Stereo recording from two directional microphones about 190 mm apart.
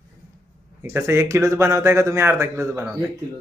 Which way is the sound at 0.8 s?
15° right (ahead or behind).